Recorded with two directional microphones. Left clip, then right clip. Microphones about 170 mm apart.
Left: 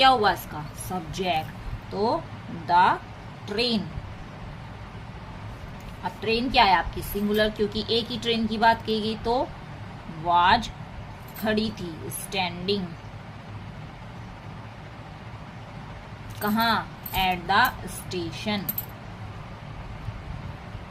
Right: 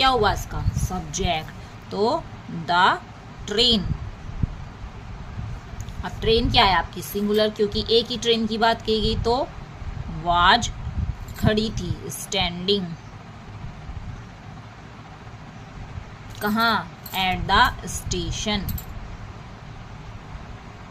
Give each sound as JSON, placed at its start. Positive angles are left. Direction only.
{"t": 0.0, "sound": "a woman's voice", "side_deg": -15}
{"t": 1.9, "sound": "a woman's voice", "side_deg": -35}
{"t": 6.0, "sound": "a woman's voice", "side_deg": -25}
{"t": 16.4, "sound": "a woman's voice", "side_deg": -20}